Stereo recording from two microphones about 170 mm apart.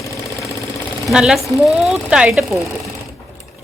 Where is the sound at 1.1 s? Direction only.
5° right (ahead or behind).